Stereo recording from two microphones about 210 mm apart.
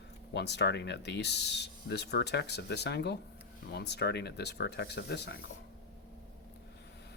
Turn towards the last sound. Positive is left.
turn(degrees=50)  # may be behind; listen again after turning